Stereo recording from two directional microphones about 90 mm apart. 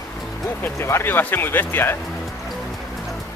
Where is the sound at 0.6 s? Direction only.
25° left (ahead or behind).